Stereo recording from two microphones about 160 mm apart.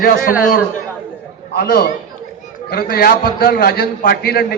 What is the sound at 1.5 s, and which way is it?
A man's voice, 70° left (ahead or behind).